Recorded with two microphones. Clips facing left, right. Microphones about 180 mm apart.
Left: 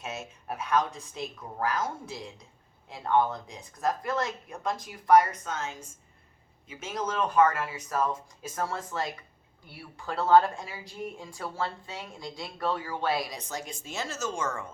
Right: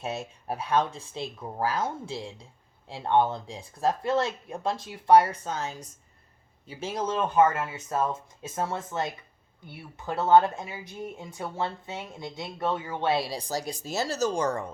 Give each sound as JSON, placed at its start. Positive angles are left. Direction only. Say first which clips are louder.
{"t": 0.0, "sound": "speech", "louder": "right 5 dB", "side_deg": -35}